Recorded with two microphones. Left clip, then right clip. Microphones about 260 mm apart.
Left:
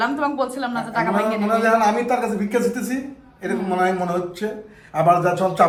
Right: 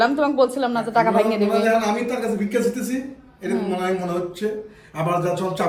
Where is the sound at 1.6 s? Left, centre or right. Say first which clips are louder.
Left 3 dB; centre.